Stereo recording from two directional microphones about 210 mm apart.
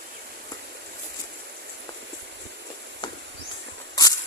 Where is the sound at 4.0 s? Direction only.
20° left (ahead or behind).